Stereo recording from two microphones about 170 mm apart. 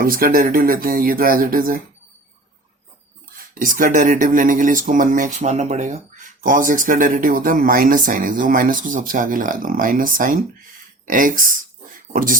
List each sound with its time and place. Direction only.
0.0 s speech: 60° right (ahead or behind)
3.3 s speech: 50° right (ahead or behind)